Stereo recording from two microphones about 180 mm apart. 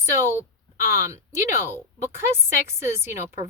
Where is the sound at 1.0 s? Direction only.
15° right (ahead or behind).